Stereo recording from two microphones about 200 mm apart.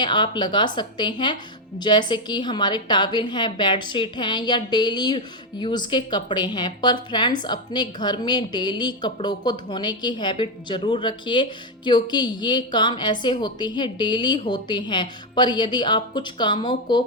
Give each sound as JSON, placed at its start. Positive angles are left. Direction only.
{"t": 0.0, "sound": "a woman's voice", "side_deg": 20}